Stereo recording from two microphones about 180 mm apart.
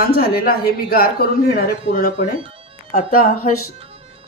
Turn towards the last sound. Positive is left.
turn(degrees=50)  # may be behind; listen again after turning